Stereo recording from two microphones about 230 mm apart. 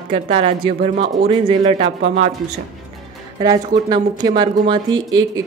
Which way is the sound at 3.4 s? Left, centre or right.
Centre.